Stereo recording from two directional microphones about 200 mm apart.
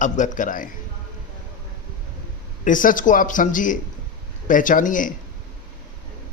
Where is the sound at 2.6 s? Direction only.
40° left (ahead or behind).